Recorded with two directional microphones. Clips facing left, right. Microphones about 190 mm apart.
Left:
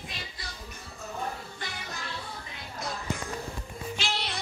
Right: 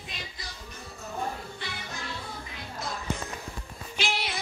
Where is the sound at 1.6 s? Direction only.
45° left (ahead or behind).